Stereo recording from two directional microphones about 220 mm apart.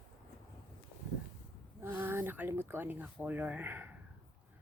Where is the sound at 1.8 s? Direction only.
10° right (ahead or behind).